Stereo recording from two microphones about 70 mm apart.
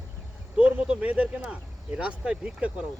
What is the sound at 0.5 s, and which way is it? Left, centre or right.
Speech, centre.